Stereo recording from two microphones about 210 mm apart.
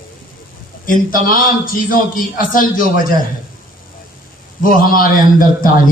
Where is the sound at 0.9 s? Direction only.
40° left (ahead or behind).